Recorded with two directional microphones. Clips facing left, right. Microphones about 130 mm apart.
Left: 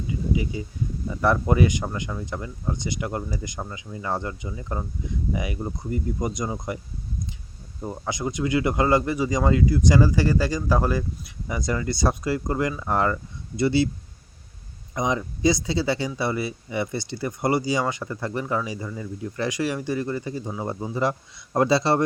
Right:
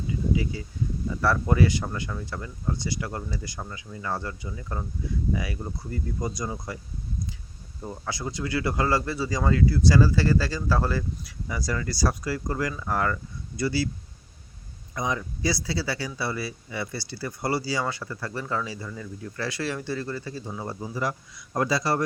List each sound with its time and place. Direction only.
0.5 s speech: 20° left (ahead or behind)
7.8 s speech: 20° left (ahead or behind)
14.9 s speech: 20° left (ahead or behind)